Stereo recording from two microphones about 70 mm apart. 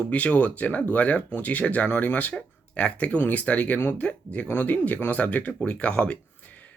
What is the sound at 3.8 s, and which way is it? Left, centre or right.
Speech, left.